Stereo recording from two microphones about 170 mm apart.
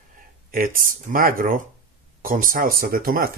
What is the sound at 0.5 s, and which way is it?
Speech, 55° right (ahead or behind).